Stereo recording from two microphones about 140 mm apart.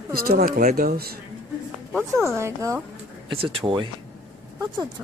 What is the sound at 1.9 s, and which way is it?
Speech, 15° right (ahead or behind).